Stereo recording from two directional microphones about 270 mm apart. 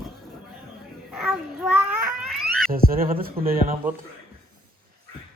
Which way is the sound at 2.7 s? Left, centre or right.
Right.